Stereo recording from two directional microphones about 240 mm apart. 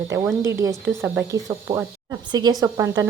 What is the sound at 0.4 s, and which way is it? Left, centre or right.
Speech, centre.